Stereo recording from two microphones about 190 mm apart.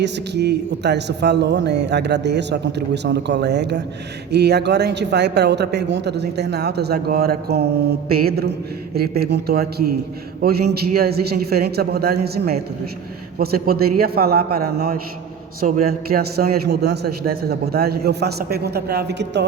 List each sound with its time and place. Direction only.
0.0 s a man's voice: 65° right (ahead or behind)